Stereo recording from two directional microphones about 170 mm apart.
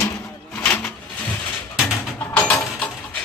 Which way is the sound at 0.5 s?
10° left (ahead or behind).